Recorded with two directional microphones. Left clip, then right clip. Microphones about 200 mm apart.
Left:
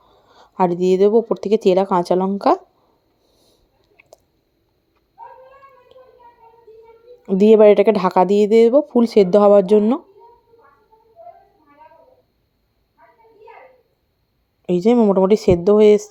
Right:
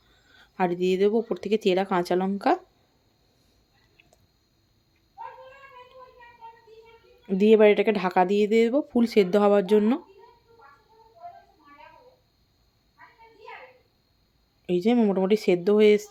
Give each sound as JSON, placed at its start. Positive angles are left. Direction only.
{"t": 0.3, "sound": "speech", "side_deg": 20}
{"t": 7.3, "sound": "speech", "side_deg": 20}
{"t": 14.7, "sound": "speech", "side_deg": 20}